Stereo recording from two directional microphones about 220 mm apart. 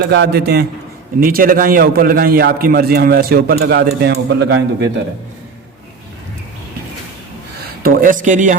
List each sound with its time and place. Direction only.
0.1 s a man's voice: 50° right (ahead or behind)
7.8 s speech: 40° right (ahead or behind)